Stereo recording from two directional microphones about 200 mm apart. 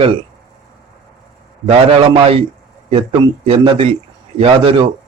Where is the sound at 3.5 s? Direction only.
30° right (ahead or behind).